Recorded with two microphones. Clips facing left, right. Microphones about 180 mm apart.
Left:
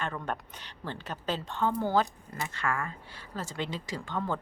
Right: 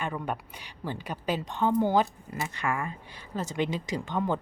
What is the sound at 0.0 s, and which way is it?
A woman's voice, 10° right (ahead or behind).